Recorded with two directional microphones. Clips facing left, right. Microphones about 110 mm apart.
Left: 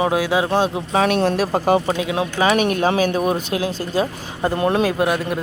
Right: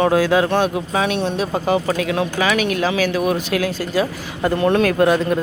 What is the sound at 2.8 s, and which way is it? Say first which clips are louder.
Speech: left 1 dB; 50° left (ahead or behind).